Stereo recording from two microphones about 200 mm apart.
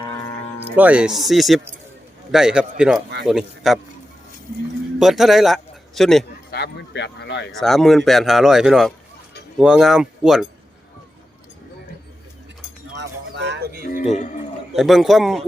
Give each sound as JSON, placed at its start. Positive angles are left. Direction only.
{"t": 0.8, "sound": "speech", "side_deg": -5}
{"t": 4.9, "sound": "a man's voice", "side_deg": 0}
{"t": 6.5, "sound": "speech", "side_deg": 55}
{"t": 7.6, "sound": "speech", "side_deg": 0}
{"t": 13.0, "sound": "music", "side_deg": -60}
{"t": 14.8, "sound": "speech", "side_deg": 0}